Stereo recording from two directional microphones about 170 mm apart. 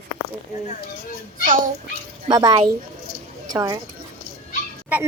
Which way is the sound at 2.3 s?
20° right (ahead or behind).